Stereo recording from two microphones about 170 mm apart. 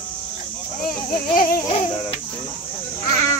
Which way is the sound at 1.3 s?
50° left (ahead or behind).